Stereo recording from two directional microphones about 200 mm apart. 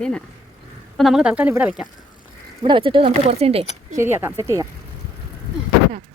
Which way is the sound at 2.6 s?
25° right (ahead or behind).